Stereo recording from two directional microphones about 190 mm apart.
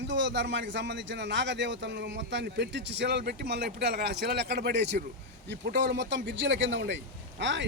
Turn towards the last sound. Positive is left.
turn(degrees=-70)  # may be behind; listen again after turning